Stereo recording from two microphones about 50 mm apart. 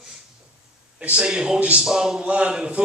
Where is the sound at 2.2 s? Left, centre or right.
Right.